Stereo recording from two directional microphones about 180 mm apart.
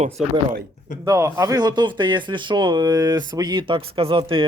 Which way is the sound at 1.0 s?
15° right (ahead or behind).